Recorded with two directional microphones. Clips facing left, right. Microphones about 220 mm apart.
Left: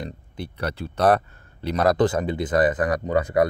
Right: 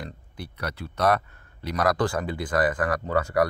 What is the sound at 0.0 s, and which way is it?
A man's voice, 25° left (ahead or behind).